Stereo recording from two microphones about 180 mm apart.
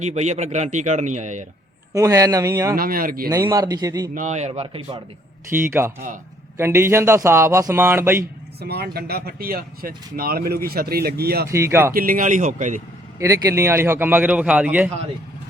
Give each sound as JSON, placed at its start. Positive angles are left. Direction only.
{"t": 0.0, "sound": "a man's voice", "side_deg": -40}
{"t": 1.9, "sound": "a man's voice", "side_deg": -20}
{"t": 2.7, "sound": "speech", "side_deg": -55}
{"t": 3.2, "sound": "a man's voice", "side_deg": -15}
{"t": 4.1, "sound": "a man's voice", "side_deg": -45}
{"t": 5.5, "sound": "a man's voice", "side_deg": -15}
{"t": 8.6, "sound": "speech", "side_deg": -60}
{"t": 11.4, "sound": "a man's voice", "side_deg": -15}
{"t": 11.9, "sound": "speech", "side_deg": -50}
{"t": 13.1, "sound": "a man's voice", "side_deg": -15}